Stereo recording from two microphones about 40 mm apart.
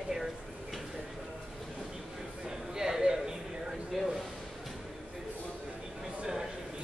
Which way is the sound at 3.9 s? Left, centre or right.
Centre.